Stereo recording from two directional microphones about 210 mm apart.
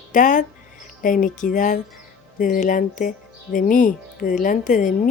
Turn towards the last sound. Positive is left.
turn(degrees=40)  # may be behind; listen again after turning